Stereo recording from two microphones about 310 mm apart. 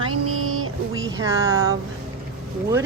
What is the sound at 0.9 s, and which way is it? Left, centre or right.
Speech, centre.